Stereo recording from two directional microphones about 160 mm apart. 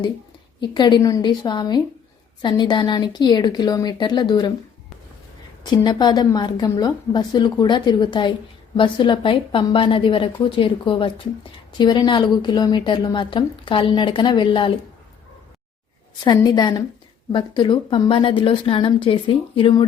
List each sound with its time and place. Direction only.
0.7 s a woman's voice: 30° left (ahead or behind)
5.7 s a woman's voice: 25° left (ahead or behind)
16.2 s a woman's voice: 25° left (ahead or behind)